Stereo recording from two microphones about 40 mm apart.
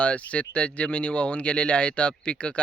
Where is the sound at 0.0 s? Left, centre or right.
Left.